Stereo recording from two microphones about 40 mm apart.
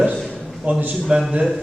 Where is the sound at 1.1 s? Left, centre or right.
Right.